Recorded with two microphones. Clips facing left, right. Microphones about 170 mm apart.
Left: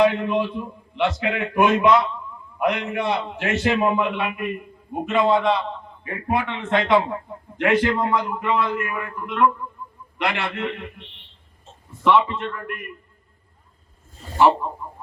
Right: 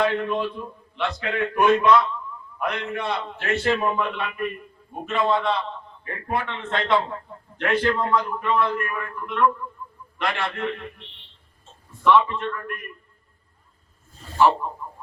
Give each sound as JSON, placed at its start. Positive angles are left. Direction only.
{"t": 0.0, "sound": "a man's voice", "side_deg": 20}
{"t": 12.0, "sound": "a man's voice", "side_deg": 15}